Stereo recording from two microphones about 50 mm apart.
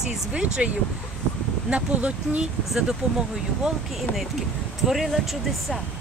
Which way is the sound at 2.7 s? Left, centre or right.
Centre.